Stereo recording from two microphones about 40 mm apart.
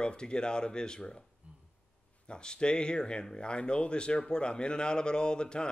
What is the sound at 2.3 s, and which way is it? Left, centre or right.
Speech, left.